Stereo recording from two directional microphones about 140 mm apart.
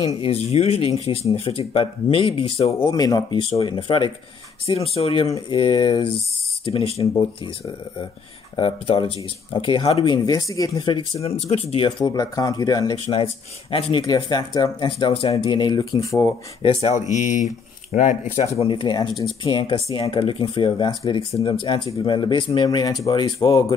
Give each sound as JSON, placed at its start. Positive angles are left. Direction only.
{"t": 0.2, "sound": "speech", "side_deg": 50}
{"t": 2.9, "sound": "speech", "side_deg": 25}
{"t": 5.3, "sound": "speech", "side_deg": 35}
{"t": 6.6, "sound": "speech", "side_deg": 45}
{"t": 8.5, "sound": "speech", "side_deg": 35}
{"t": 11.2, "sound": "speech", "side_deg": 50}
{"t": 13.0, "sound": "speech", "side_deg": 40}
{"t": 14.0, "sound": "speech", "side_deg": 30}
{"t": 16.9, "sound": "speech", "side_deg": 60}
{"t": 18.3, "sound": "speech", "side_deg": 50}